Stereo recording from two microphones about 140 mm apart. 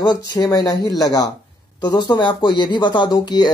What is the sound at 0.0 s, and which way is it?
Speech, 30° left (ahead or behind).